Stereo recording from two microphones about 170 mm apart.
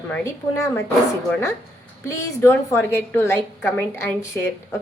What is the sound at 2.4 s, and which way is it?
A woman's voice, 15° left (ahead or behind).